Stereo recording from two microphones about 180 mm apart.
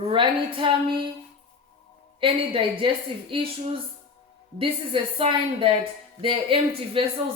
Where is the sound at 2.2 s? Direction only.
30° right (ahead or behind).